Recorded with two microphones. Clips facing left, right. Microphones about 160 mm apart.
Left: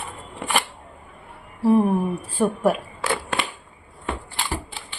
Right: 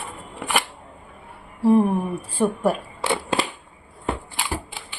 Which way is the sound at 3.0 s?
20° right (ahead or behind).